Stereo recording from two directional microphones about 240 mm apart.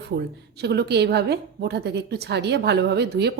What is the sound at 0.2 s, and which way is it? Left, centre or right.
A woman's voice, right.